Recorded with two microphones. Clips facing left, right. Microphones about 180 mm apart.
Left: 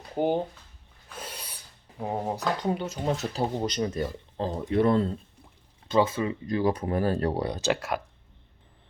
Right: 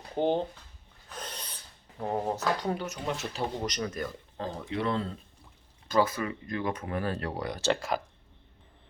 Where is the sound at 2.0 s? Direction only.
10° left (ahead or behind).